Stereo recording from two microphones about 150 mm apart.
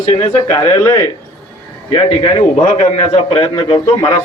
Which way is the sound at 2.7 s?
45° left (ahead or behind).